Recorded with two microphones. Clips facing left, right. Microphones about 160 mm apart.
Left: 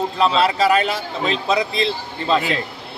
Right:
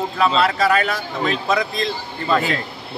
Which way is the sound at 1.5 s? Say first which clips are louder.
Left 1 dB; 30° left (ahead or behind).